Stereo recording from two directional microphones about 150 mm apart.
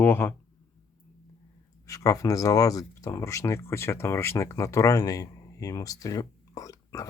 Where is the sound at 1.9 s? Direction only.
20° left (ahead or behind).